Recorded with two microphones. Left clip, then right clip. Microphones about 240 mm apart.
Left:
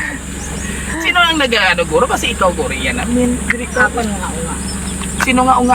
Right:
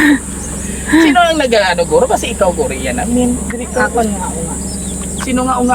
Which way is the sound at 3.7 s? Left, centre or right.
Centre.